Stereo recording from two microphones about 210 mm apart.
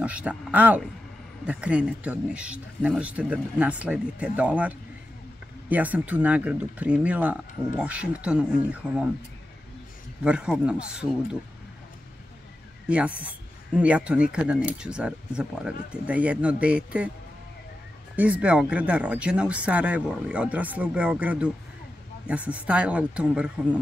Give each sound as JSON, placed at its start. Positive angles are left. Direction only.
{"t": 0.0, "sound": "speech", "side_deg": -5}
{"t": 10.2, "sound": "speech", "side_deg": -5}
{"t": 12.8, "sound": "speech", "side_deg": -5}
{"t": 18.1, "sound": "speech", "side_deg": -5}